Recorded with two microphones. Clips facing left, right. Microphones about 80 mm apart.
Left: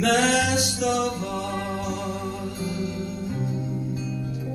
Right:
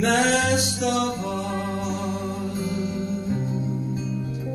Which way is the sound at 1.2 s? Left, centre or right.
Right.